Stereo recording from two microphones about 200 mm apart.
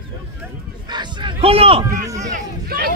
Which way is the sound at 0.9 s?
20° right (ahead or behind).